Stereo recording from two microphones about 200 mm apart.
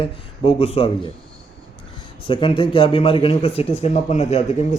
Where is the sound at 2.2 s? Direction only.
25° left (ahead or behind).